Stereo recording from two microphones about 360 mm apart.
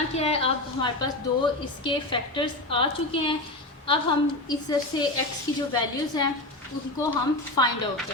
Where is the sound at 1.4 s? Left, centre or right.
Centre.